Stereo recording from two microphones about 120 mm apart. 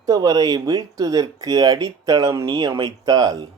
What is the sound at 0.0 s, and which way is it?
Speech, 30° right (ahead or behind).